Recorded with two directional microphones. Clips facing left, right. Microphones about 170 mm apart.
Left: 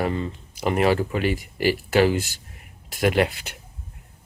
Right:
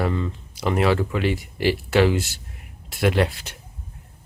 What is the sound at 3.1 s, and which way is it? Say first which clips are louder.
Speech: left 1 dB; 5° left (ahead or behind).